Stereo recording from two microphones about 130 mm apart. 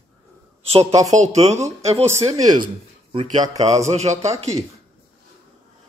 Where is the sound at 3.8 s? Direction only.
60° right (ahead or behind).